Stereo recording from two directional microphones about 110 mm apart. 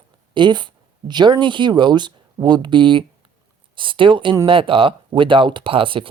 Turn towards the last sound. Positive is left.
turn(degrees=-50)  # may be behind; listen again after turning